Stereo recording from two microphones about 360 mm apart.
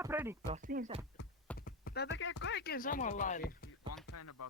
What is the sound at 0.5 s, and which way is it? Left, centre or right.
Speech, right.